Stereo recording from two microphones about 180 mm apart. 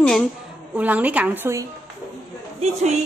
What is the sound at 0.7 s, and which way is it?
Speech, 10° right (ahead or behind).